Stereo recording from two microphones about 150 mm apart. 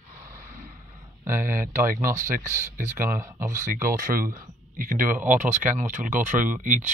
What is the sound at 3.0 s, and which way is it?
Speech, 65° right (ahead or behind).